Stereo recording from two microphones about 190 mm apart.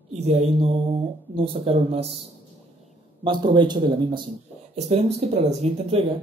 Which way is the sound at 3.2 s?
25° right (ahead or behind).